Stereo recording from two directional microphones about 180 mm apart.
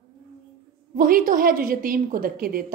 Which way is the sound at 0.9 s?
50° right (ahead or behind).